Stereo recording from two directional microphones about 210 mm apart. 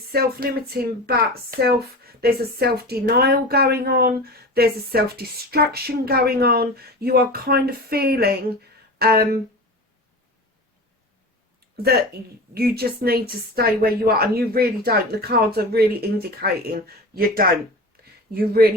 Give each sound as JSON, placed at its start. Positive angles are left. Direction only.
{"t": 0.1, "sound": "speech", "side_deg": -45}
{"t": 12.5, "sound": "speech", "side_deg": -45}
{"t": 17.9, "sound": "a sound", "side_deg": -45}
{"t": 18.3, "sound": "speech", "side_deg": -45}